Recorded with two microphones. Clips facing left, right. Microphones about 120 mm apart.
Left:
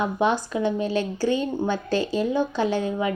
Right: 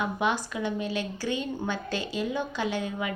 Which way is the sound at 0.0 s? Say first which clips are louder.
Left 5 dB; 30° left (ahead or behind).